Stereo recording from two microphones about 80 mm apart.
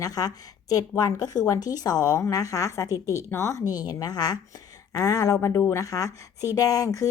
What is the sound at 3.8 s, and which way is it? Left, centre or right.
A woman's voice, left.